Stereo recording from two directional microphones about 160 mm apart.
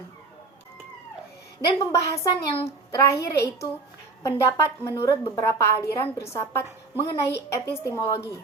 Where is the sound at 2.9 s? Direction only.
20° left (ahead or behind).